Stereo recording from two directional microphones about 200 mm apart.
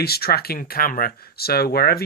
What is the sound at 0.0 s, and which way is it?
Speech, 50° left (ahead or behind).